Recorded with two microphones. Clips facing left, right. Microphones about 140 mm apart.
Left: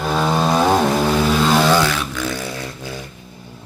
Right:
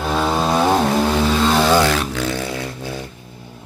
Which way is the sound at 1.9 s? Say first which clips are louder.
Right 3 dB; 35° right (ahead or behind).